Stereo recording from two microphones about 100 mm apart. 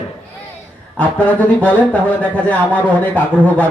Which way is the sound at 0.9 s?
15° left (ahead or behind).